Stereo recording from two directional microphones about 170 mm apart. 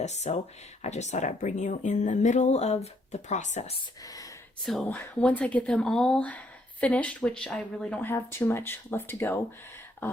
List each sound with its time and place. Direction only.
0.0 s speech: 40° left (ahead or behind)
4.0 s speech: 20° left (ahead or behind)
4.6 s speech: centre (ahead or behind)